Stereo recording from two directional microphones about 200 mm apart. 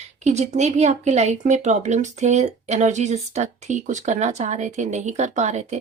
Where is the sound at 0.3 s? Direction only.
35° right (ahead or behind).